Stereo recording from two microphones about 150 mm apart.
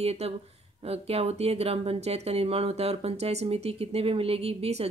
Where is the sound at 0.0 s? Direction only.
45° right (ahead or behind).